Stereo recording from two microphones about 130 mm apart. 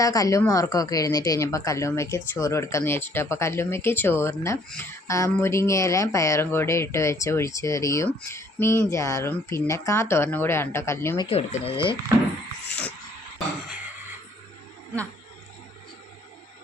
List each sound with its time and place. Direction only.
0.0 s speech: 25° left (ahead or behind)
11.3 s speech: 50° left (ahead or behind)